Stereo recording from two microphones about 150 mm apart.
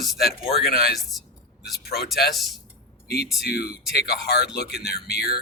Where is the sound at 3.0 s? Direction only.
90° left.